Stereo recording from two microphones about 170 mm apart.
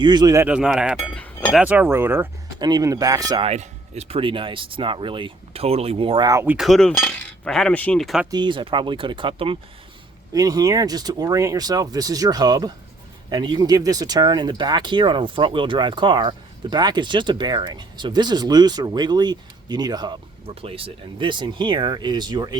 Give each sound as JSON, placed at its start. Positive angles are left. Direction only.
{"t": 0.0, "sound": "speech", "side_deg": -25}
{"t": 0.4, "sound": "speech", "side_deg": -5}
{"t": 1.1, "sound": "chink", "side_deg": 10}
{"t": 1.5, "sound": "speech", "side_deg": -10}
{"t": 2.6, "sound": "speech", "side_deg": -25}
{"t": 3.4, "sound": "speech", "side_deg": -40}
{"t": 6.7, "sound": "speech", "side_deg": 5}
{"t": 8.3, "sound": "speech", "side_deg": -25}
{"t": 10.3, "sound": "speech", "side_deg": -20}